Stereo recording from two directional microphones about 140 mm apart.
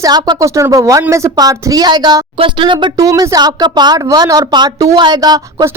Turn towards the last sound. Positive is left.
turn(degrees=-25)  # may be behind; listen again after turning